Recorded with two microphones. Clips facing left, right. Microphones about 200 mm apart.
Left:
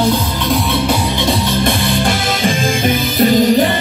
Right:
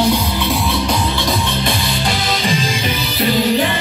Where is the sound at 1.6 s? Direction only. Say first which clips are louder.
Left 5 dB; 50° left (ahead or behind).